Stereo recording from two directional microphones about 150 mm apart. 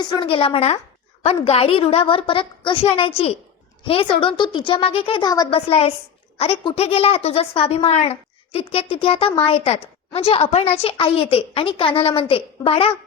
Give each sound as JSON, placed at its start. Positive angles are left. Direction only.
{"t": 0.0, "sound": "a woman's voice", "side_deg": 30}
{"t": 5.5, "sound": "a woman's voice", "side_deg": 40}